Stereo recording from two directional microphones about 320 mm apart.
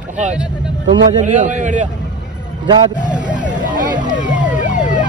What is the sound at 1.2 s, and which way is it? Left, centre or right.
A man's voice, right.